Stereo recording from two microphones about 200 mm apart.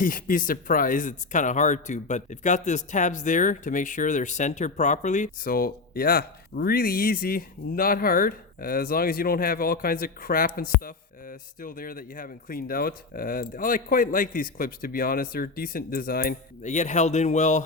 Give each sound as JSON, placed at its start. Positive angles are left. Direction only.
{"t": 0.0, "sound": "speech", "side_deg": 45}